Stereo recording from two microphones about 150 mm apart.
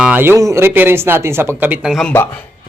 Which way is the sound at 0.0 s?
10° right (ahead or behind).